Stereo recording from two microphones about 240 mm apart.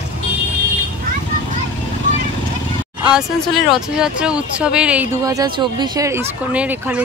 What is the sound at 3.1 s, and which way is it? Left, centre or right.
Speech, centre.